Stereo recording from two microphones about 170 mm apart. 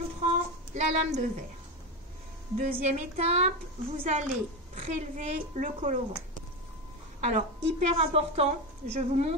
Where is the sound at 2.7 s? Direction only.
40° right (ahead or behind).